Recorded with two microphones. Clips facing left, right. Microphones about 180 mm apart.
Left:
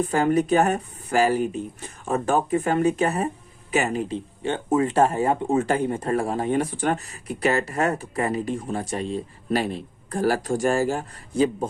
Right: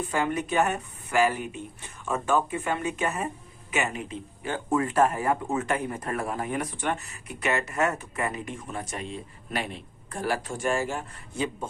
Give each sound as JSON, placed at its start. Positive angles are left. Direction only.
{"t": 0.0, "sound": "speech", "side_deg": 40}